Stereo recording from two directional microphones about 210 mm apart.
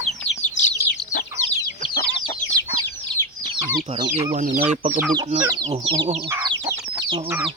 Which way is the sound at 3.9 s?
30° right (ahead or behind).